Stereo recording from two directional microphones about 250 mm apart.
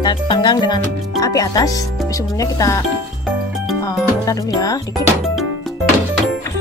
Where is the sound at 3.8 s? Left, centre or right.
Centre.